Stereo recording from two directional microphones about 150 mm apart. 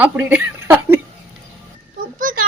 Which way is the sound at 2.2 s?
65° right (ahead or behind).